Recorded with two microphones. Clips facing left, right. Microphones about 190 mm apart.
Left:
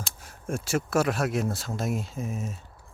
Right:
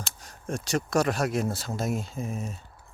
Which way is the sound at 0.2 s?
5° left (ahead or behind).